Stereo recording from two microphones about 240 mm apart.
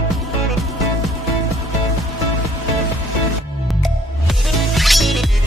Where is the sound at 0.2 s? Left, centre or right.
Centre.